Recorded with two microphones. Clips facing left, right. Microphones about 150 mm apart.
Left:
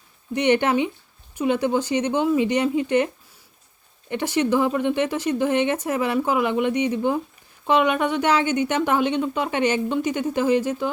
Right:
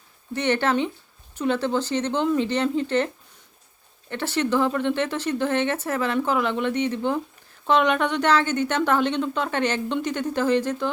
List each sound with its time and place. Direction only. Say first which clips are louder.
0.3 s speech: left 3 dB; 15° left (ahead or behind)
4.1 s speech: left 3 dB; 15° left (ahead or behind)